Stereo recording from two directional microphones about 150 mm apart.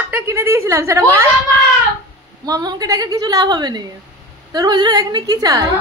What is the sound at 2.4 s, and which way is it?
Speech, 25° right (ahead or behind).